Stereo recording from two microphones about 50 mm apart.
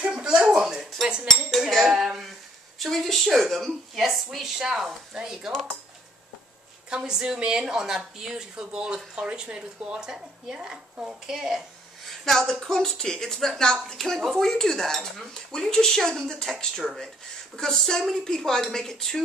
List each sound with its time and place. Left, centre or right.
0.1 s a sound: centre
1.2 s cutlery: centre
1.9 s a woman's voice: centre
6.9 s speech: centre
12.0 s speech: centre